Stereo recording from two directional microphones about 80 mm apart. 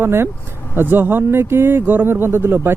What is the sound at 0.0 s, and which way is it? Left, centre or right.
Speech, right.